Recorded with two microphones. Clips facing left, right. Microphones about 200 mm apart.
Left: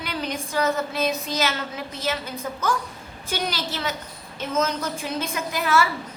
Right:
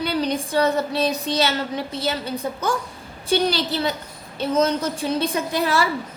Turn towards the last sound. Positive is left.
turn(degrees=-35)  # may be behind; listen again after turning